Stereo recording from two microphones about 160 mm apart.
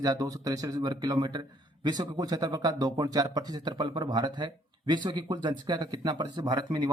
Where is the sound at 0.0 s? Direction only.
20° right (ahead or behind).